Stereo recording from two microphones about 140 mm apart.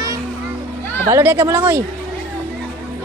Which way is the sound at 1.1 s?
15° right (ahead or behind).